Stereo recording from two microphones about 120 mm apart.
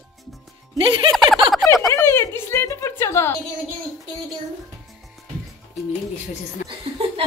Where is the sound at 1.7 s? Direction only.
25° left (ahead or behind).